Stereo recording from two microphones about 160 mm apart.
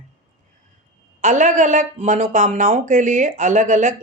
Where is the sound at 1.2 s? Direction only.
50° right (ahead or behind).